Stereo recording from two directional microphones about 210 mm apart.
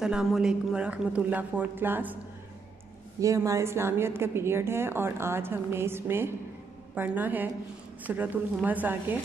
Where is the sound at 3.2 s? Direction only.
15° right (ahead or behind).